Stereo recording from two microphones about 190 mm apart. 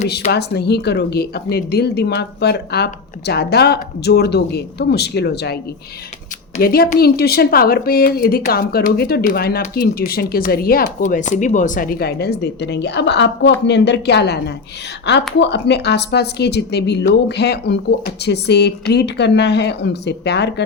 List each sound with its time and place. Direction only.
0.3 s speech: 60° left (ahead or behind)
6.6 s a woman's voice: 55° left (ahead or behind)